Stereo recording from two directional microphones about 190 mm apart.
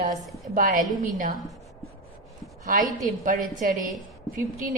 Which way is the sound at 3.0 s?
45° right (ahead or behind).